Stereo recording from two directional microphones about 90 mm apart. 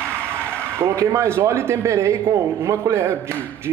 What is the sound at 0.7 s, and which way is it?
A man's voice, 30° right (ahead or behind).